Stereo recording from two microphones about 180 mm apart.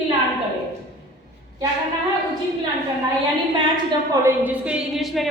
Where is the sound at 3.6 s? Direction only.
25° right (ahead or behind).